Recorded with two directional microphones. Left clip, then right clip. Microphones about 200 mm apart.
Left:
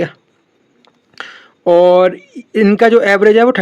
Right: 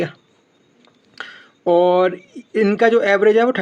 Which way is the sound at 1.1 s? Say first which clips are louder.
Left 4 dB; 30° left (ahead or behind).